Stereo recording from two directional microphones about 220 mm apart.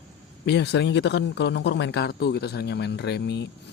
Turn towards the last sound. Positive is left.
turn(degrees=50)  # may be behind; listen again after turning